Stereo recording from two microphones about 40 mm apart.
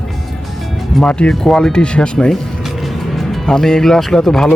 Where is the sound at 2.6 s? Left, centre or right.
Centre.